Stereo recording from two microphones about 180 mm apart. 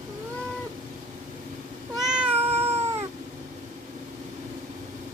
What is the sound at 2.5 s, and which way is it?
Cat, 35° right (ahead or behind).